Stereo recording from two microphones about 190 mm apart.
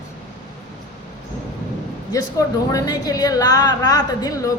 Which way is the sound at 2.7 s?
20° left (ahead or behind).